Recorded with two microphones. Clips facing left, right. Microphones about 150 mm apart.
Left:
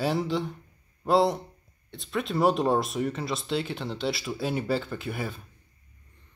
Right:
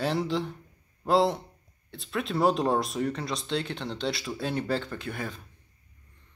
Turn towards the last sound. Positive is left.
turn(degrees=5)  # may be behind; listen again after turning